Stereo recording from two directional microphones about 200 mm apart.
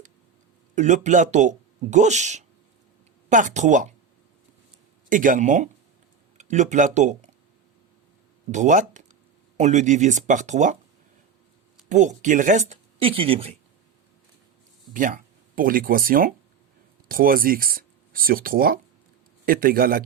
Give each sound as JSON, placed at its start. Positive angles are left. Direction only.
{"t": 0.8, "sound": "speech", "side_deg": -35}
{"t": 5.0, "sound": "speech", "side_deg": -40}
{"t": 8.5, "sound": "speech", "side_deg": -40}
{"t": 11.9, "sound": "speech", "side_deg": -40}
{"t": 14.9, "sound": "a man's voice", "side_deg": -40}